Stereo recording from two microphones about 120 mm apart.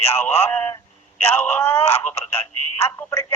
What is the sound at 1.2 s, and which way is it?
Speech, 15° left (ahead or behind).